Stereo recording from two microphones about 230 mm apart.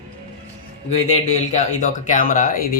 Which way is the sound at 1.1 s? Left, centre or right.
Left.